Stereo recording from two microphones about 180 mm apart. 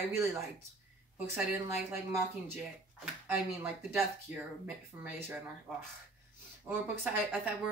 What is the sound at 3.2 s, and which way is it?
Speech, 15° right (ahead or behind).